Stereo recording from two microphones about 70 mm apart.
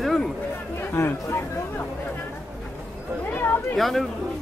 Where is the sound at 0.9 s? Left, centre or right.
Left.